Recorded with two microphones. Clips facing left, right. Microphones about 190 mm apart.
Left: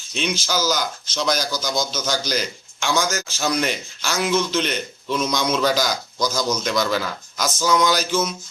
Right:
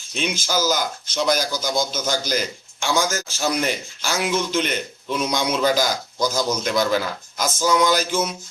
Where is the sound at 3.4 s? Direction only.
10° right (ahead or behind).